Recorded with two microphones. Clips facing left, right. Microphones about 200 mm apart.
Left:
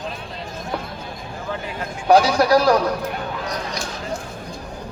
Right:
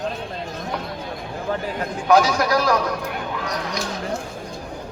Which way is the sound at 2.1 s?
35° left (ahead or behind).